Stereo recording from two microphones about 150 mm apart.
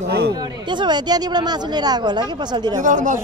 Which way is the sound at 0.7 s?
30° right (ahead or behind).